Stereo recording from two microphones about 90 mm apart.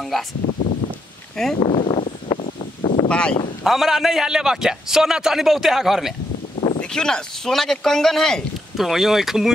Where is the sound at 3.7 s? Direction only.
5° right (ahead or behind).